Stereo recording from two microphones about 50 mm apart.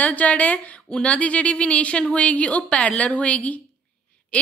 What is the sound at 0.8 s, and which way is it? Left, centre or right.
Speech, centre.